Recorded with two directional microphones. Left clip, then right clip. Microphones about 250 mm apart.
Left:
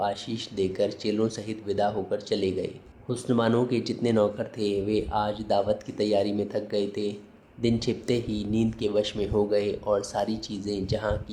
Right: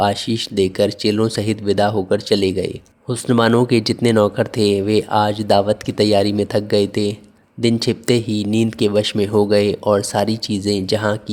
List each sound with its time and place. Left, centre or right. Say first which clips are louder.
0.0 s speech: right 11 dB; right